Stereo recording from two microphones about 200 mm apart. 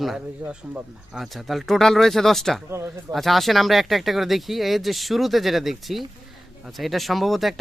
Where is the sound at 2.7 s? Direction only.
15° right (ahead or behind).